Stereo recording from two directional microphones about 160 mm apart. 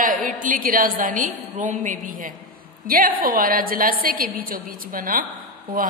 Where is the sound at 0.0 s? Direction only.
55° right (ahead or behind).